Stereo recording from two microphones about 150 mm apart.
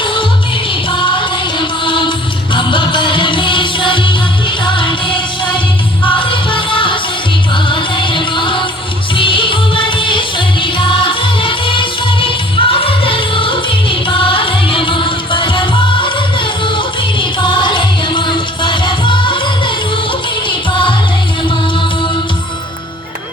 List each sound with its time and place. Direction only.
0.0 s music: 35° left (ahead or behind)